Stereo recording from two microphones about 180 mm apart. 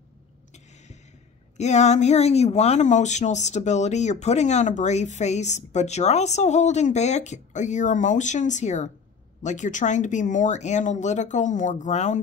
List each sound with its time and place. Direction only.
1.6 s speech: 40° left (ahead or behind)